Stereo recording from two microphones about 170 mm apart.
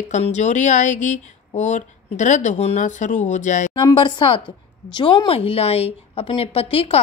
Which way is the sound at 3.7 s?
30° left (ahead or behind).